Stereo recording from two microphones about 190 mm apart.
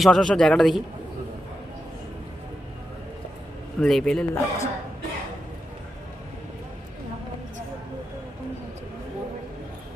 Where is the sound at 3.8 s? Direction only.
5° left (ahead or behind).